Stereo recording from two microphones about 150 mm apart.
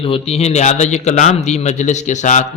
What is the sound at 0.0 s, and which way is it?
A man's voice, 40° left (ahead or behind).